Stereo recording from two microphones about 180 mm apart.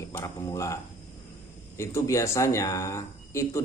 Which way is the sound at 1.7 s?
15° left (ahead or behind).